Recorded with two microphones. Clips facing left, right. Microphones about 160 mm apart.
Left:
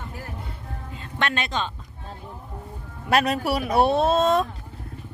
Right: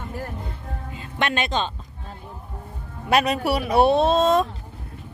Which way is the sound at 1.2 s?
20° right (ahead or behind).